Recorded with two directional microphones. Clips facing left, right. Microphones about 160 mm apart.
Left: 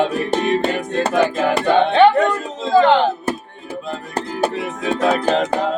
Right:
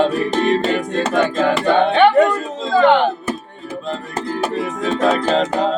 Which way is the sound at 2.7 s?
35° left (ahead or behind).